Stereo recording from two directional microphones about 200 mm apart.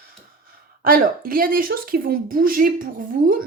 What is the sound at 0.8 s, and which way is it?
A woman's voice, 45° right (ahead or behind).